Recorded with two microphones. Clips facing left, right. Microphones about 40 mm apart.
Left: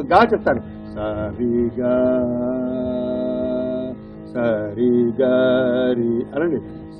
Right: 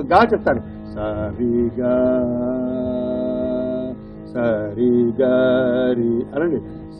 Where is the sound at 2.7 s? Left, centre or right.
Centre.